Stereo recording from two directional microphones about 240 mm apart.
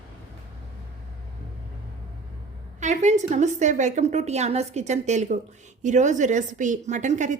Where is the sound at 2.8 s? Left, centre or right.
Right.